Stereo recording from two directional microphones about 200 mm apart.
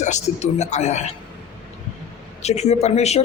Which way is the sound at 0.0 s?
35° left (ahead or behind).